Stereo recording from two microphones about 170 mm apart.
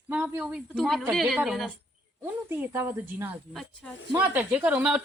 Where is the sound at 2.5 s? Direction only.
10° right (ahead or behind).